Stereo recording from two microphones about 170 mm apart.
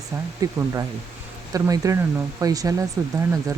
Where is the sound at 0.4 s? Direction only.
20° right (ahead or behind).